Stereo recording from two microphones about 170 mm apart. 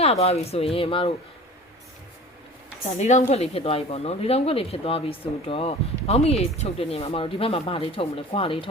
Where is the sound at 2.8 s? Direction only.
40° left (ahead or behind).